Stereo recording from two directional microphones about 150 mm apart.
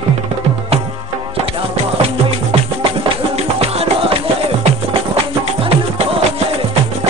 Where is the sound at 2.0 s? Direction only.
40° right (ahead or behind).